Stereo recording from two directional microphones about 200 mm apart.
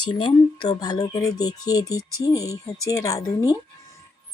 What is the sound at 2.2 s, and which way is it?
Speech, 15° left (ahead or behind).